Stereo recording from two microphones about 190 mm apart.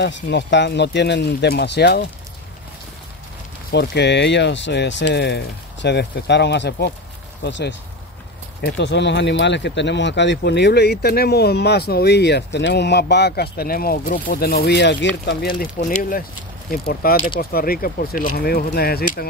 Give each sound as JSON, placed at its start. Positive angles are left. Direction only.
{"t": 0.0, "sound": "speech", "side_deg": 70}
{"t": 3.7, "sound": "speech", "side_deg": 65}
{"t": 15.2, "sound": "speech", "side_deg": 50}